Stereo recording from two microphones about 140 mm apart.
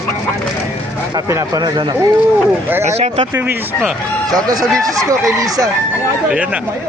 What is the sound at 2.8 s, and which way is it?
Speech, 50° right (ahead or behind).